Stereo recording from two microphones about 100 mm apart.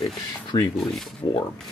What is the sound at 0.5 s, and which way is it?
Speech, 45° left (ahead or behind).